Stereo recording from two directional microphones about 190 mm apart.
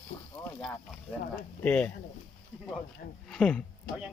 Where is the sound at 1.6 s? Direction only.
10° left (ahead or behind).